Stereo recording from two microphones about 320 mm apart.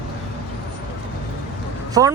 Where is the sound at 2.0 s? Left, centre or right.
Centre.